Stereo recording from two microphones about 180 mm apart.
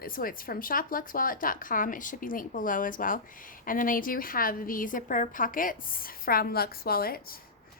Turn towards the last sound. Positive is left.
turn(degrees=55)  # may be behind; listen again after turning